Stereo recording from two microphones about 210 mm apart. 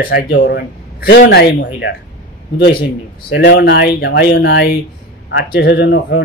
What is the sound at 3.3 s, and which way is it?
A man's voice, 55° left (ahead or behind).